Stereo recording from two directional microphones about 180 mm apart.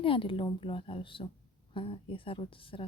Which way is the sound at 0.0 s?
30° left (ahead or behind).